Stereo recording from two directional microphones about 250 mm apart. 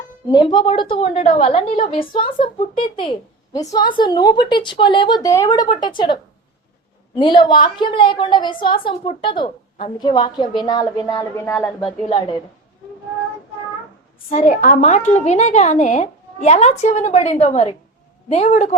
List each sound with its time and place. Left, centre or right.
0.3 s a woman's voice: centre
7.2 s a woman's voice: centre
14.3 s a woman's voice: left